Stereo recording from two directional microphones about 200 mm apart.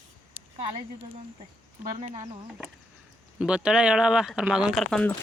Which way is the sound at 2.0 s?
35° right (ahead or behind).